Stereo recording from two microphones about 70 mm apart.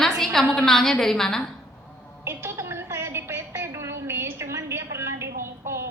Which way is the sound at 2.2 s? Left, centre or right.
Right.